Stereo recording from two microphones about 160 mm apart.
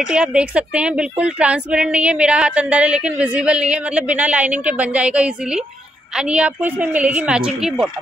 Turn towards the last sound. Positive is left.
turn(degrees=-5)  # may be behind; listen again after turning